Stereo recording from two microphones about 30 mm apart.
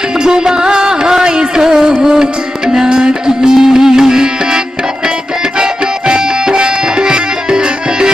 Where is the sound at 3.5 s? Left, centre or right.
Centre.